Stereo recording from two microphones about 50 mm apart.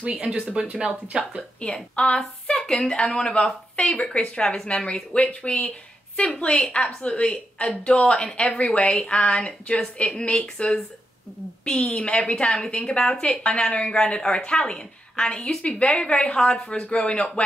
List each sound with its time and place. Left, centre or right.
0.1 s speech: centre
0.5 s speech: right
1.6 s speech: left
11.6 s speech: centre